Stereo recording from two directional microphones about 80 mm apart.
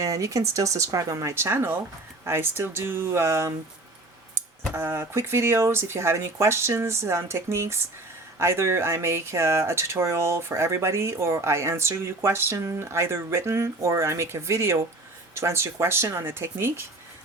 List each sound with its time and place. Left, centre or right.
0.0 s speech: right